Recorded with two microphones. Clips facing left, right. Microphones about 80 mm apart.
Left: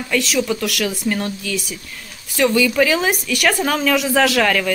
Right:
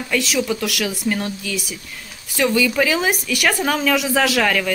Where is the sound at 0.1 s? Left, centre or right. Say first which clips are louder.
Left 1 dB; centre.